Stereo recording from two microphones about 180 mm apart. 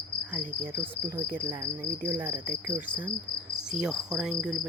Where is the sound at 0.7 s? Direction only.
15° right (ahead or behind).